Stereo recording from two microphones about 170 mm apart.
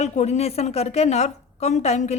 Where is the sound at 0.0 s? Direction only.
40° left (ahead or behind).